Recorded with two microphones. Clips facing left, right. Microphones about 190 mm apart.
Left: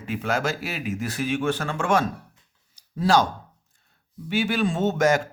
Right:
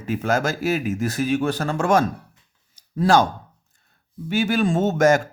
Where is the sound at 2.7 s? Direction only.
50° right (ahead or behind).